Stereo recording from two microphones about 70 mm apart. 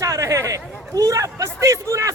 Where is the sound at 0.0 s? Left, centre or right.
Right.